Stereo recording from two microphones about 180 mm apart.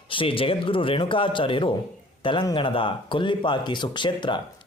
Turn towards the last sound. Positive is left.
turn(degrees=25)  # may be behind; listen again after turning